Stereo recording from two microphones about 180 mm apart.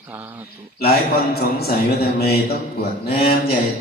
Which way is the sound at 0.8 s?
60° left (ahead or behind).